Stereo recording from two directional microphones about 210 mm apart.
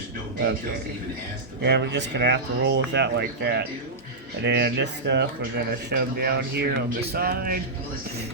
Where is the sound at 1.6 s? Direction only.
55° right (ahead or behind).